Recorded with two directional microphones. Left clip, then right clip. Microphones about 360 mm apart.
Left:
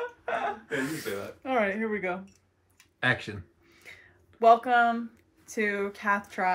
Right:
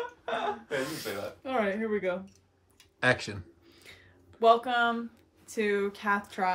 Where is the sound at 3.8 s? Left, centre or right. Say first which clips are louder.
Left 4 dB; centre.